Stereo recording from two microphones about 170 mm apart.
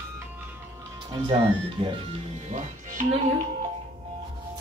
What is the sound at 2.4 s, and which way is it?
Speech, 50° right (ahead or behind).